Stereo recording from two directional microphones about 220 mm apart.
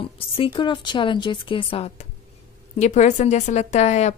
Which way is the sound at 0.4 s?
20° left (ahead or behind).